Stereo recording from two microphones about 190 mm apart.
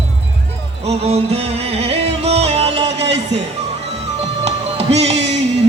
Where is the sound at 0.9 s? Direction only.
35° right (ahead or behind).